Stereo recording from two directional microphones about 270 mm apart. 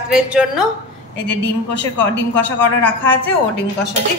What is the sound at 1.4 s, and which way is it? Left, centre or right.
Speech, left.